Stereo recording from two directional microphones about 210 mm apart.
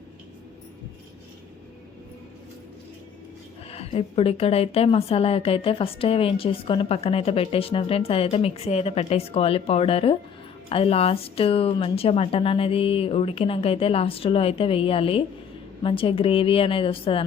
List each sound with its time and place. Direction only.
3.7 s a woman's voice: 30° left (ahead or behind)